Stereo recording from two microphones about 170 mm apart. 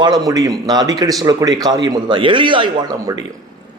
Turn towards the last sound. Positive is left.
turn(degrees=-20)  # may be behind; listen again after turning